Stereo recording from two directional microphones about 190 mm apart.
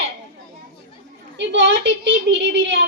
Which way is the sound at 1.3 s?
70° right (ahead or behind).